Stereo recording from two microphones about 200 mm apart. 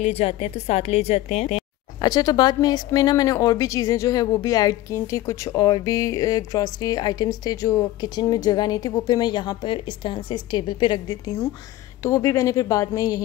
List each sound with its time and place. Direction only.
0.0 s a woman's voice: 30° left (ahead or behind)
2.0 s speech: 20° left (ahead or behind)